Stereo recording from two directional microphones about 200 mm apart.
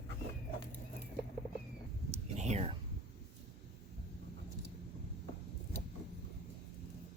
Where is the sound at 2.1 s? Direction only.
35° right (ahead or behind).